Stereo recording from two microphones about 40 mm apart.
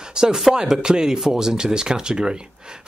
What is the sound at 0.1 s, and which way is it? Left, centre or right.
Speech, centre.